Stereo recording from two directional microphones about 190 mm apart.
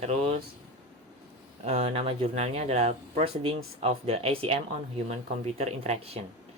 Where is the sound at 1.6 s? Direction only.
35° right (ahead or behind).